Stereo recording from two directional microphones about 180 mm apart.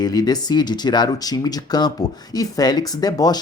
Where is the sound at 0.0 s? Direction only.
20° left (ahead or behind).